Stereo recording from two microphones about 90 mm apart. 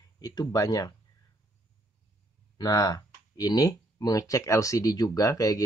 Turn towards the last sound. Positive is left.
turn(degrees=40)  # may be behind; listen again after turning